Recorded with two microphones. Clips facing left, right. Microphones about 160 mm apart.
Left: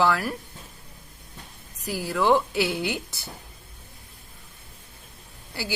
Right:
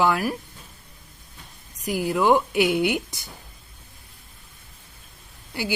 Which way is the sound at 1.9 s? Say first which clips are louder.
Right 2 dB; 15° right (ahead or behind).